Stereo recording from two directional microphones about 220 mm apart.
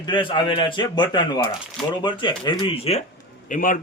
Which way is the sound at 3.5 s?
40° left (ahead or behind).